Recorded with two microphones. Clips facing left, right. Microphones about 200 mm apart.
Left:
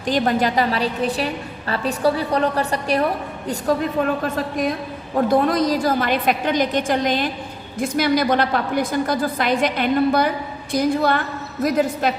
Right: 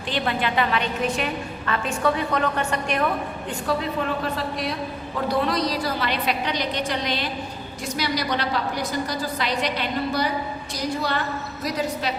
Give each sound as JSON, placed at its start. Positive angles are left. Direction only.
{"t": 0.1, "sound": "a woman's voice", "side_deg": 40}
{"t": 4.2, "sound": "a woman's voice", "side_deg": 50}